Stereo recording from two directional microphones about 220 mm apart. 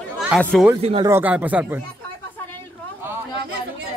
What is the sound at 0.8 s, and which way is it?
Speech, 25° right (ahead or behind).